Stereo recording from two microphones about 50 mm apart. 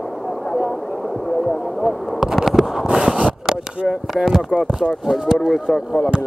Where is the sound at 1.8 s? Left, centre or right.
Centre.